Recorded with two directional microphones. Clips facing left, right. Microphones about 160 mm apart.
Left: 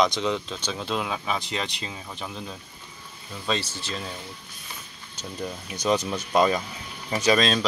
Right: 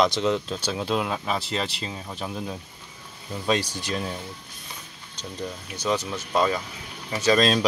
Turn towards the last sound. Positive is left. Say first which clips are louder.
# right 2 dB
turn(degrees=-5)  # may be behind; listen again after turning